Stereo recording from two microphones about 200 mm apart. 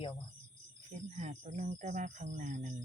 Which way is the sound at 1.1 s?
35° right (ahead or behind).